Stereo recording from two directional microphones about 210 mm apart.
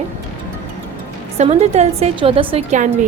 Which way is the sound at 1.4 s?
30° right (ahead or behind).